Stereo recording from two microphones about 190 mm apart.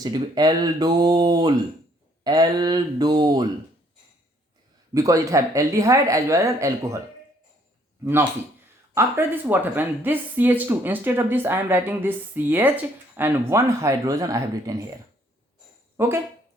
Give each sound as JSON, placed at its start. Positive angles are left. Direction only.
{"t": 0.0, "sound": "speech", "side_deg": -20}
{"t": 4.9, "sound": "speech", "side_deg": -15}
{"t": 9.0, "sound": "speech", "side_deg": -10}
{"t": 16.0, "sound": "speech", "side_deg": -10}